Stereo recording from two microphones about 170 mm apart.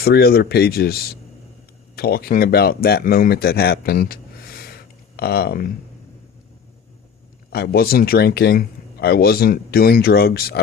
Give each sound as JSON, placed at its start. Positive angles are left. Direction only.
{"t": 0.0, "sound": "a man's voice", "side_deg": 65}
{"t": 7.5, "sound": "a man's voice", "side_deg": 65}